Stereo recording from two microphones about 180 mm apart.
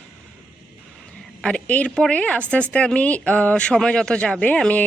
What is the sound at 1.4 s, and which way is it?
A woman's voice, 5° left (ahead or behind).